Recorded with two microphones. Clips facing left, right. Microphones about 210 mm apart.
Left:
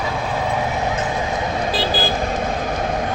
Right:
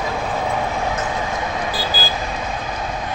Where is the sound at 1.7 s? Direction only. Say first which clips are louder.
Left 4 dB; 25° left (ahead or behind).